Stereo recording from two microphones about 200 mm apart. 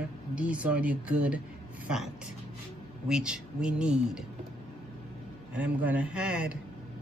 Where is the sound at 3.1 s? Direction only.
5° right (ahead or behind).